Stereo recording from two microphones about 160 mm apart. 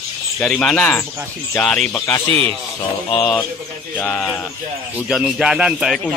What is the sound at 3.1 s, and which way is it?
Speech, 5° left (ahead or behind).